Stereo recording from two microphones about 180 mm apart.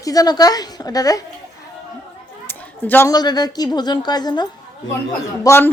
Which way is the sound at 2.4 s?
10° left (ahead or behind).